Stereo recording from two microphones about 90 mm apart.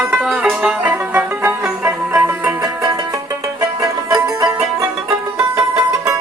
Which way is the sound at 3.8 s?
40° right (ahead or behind).